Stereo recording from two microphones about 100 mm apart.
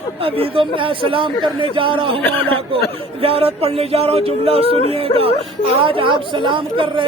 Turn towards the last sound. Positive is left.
turn(degrees=-60)  # may be behind; listen again after turning